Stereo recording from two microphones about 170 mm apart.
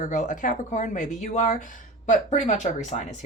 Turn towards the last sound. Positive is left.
turn(degrees=45)  # may be behind; listen again after turning